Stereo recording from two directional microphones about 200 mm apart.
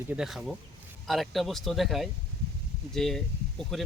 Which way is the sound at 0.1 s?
5° right (ahead or behind).